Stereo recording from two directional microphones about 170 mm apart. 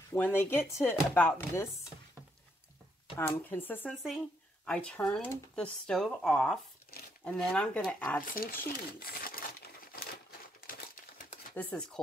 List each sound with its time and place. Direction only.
0.1 s speech: 10° left (ahead or behind)
3.2 s speech: 15° left (ahead or behind)
6.9 s a sound: 60° left (ahead or behind)
7.2 s speech: 5° left (ahead or behind)
8.3 s crumpling: 60° left (ahead or behind)
11.5 s speech: 5° left (ahead or behind)